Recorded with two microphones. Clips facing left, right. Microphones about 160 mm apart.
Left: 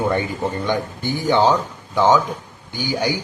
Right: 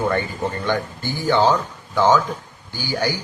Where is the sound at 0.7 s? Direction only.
15° left (ahead or behind).